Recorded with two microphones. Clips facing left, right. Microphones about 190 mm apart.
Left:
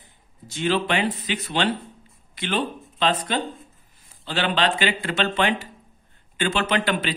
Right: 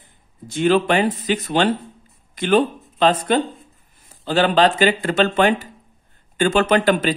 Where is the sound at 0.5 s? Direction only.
50° right (ahead or behind).